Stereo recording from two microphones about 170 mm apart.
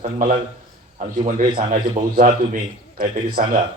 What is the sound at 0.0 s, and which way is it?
A man's voice, 50° right (ahead or behind).